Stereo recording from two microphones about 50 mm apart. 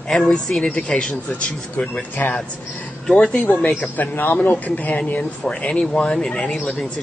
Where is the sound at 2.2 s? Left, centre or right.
Left.